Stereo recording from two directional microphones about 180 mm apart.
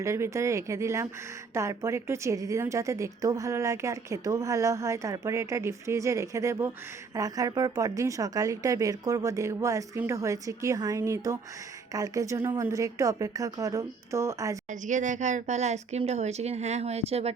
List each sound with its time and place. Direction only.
0.0 s a woman's voice: 15° right (ahead or behind)
14.7 s speech: 45° right (ahead or behind)